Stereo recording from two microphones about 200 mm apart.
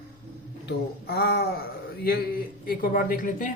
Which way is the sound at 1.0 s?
50° left (ahead or behind).